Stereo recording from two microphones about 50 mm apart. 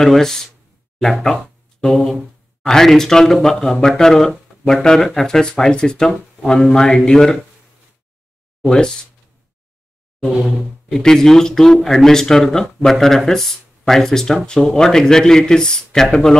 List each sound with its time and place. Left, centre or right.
0.0 s speech: centre
1.9 s a sound: centre
2.6 s speech: centre
8.6 s speech: centre
10.4 s speech: centre
11.0 s speech: centre